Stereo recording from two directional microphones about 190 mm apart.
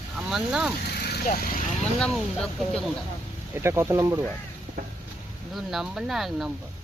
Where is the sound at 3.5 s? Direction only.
15° right (ahead or behind).